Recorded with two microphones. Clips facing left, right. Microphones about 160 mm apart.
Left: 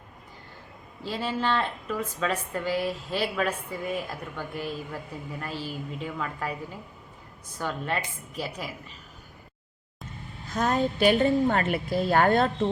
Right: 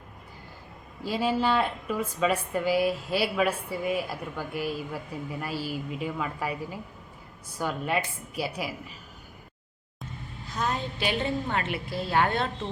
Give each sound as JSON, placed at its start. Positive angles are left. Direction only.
{"t": 1.0, "sound": "a woman's voice", "side_deg": -10}
{"t": 10.5, "sound": "a woman's voice", "side_deg": 45}